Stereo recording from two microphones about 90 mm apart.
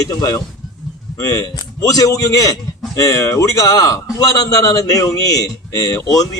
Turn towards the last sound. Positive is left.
turn(degrees=40)  # may be behind; listen again after turning